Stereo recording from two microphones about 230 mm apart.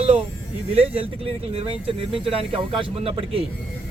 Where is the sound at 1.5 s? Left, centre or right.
Right.